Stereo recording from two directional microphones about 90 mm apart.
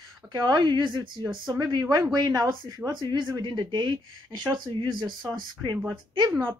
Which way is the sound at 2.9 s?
60° right (ahead or behind).